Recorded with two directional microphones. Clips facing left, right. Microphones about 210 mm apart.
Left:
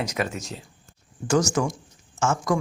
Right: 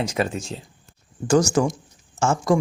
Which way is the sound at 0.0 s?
30° right (ahead or behind).